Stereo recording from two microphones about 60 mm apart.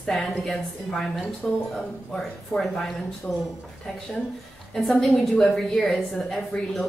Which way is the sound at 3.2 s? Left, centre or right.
Centre.